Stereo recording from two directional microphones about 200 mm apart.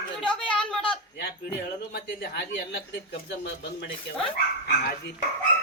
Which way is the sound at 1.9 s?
50° left (ahead or behind).